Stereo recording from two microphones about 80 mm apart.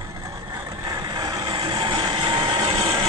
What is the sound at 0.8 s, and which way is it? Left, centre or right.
Vehicle, right.